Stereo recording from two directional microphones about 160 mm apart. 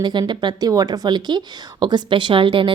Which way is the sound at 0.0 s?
30° right (ahead or behind).